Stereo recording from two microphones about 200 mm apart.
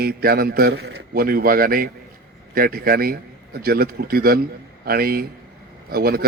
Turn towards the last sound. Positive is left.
turn(degrees=-50)  # may be behind; listen again after turning